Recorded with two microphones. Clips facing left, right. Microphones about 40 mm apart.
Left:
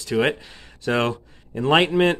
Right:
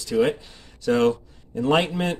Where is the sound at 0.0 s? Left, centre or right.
Left.